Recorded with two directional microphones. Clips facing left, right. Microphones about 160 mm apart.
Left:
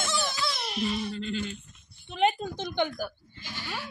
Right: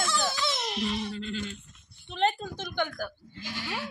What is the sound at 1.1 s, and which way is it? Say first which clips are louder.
A woman's voice: left 2 dB; 5° left (ahead or behind).